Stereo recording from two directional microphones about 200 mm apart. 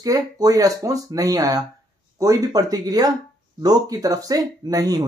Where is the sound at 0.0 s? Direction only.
20° right (ahead or behind).